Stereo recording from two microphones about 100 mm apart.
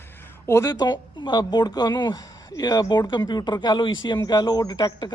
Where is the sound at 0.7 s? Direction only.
45° left (ahead or behind).